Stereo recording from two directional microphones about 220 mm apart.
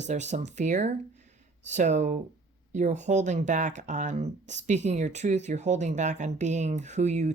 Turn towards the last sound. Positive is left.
turn(degrees=-30)  # may be behind; listen again after turning